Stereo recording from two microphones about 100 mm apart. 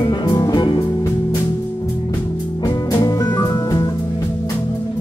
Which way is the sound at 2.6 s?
40° left (ahead or behind).